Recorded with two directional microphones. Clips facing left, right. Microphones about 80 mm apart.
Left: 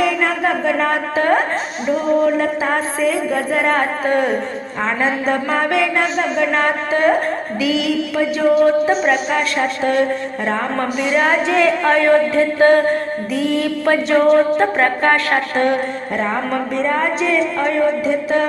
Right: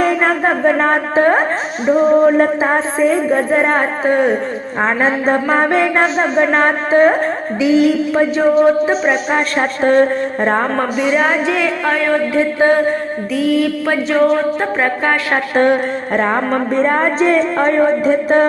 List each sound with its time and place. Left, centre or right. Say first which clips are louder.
0.0 s a woman's voice: right 3 dB; right
4.8 s a sound: right 4 dB; right
11.0 s music: right 1 dB; centre
12.3 s music: even; centre
13.3 s music: right 4 dB; centre
16.1 s a sound: right 4 dB; right